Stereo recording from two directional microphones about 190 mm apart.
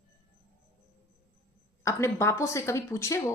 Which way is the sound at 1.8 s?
15° left (ahead or behind).